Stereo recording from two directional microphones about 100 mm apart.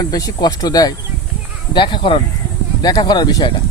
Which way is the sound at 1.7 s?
50° left (ahead or behind).